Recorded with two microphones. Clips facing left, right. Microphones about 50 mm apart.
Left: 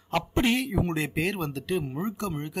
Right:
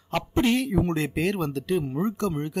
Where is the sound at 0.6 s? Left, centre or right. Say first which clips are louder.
Right 3 dB; left.